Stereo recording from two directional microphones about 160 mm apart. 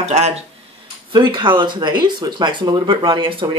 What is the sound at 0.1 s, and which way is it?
Speech, 45° right (ahead or behind).